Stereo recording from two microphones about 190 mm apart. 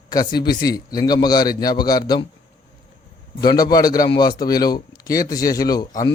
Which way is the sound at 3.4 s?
20° left (ahead or behind).